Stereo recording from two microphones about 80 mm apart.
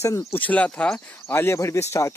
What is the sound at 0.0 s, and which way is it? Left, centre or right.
Speech, left.